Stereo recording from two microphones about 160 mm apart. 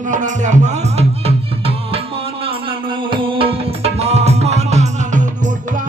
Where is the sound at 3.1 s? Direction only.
35° right (ahead or behind).